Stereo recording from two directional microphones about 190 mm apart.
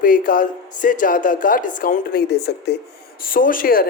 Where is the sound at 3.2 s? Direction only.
45° left (ahead or behind).